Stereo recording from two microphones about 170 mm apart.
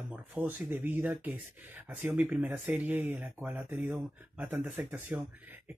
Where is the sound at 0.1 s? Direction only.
10° right (ahead or behind).